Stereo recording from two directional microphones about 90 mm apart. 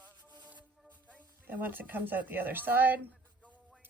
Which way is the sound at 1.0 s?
15° right (ahead or behind).